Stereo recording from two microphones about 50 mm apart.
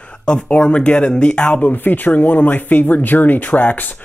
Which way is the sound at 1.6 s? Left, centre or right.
Left.